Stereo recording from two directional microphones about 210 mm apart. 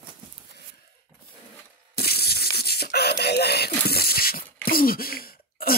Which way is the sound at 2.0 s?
45° left (ahead or behind).